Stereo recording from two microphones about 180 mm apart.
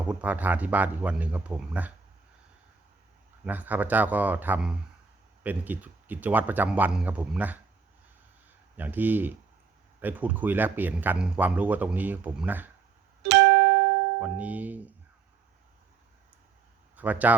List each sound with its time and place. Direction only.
0.0 s speech: 5° right (ahead or behind)
3.4 s speech: 10° right (ahead or behind)
8.7 s speech: 10° right (ahead or behind)
13.3 s music: 70° right (ahead or behind)
14.2 s speech: 10° right (ahead or behind)
17.0 s speech: 10° right (ahead or behind)